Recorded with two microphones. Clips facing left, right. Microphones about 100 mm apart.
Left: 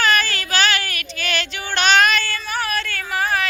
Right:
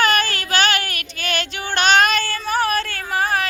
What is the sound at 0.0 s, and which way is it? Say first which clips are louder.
Child singing: right 1 dB; 45° right (ahead or behind).